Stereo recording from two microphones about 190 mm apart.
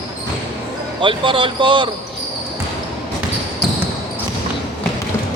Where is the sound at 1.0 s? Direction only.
25° right (ahead or behind).